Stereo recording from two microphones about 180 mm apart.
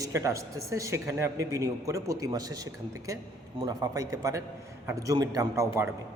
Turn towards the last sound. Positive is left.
turn(degrees=-15)  # may be behind; listen again after turning